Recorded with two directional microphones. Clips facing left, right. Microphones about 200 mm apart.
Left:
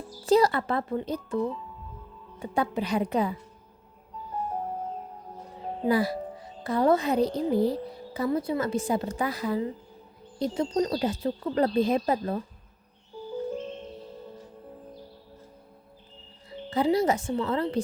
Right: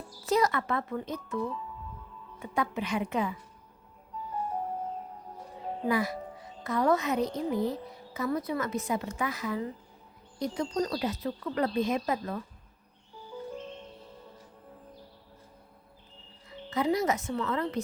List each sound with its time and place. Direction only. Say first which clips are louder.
0.1 s speech: left 5 dB; 30° left (ahead or behind)
5.9 s speech: left 5 dB; 30° left (ahead or behind)
16.5 s speech: left 4 dB; 30° left (ahead or behind)